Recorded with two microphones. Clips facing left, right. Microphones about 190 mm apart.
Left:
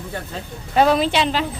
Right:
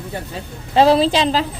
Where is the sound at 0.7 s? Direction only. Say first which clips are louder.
Right 3 dB; 30° right (ahead or behind).